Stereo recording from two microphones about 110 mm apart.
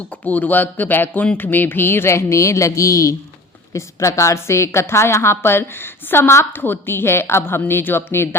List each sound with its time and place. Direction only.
0.3 s a woman's voice: 15° left (ahead or behind)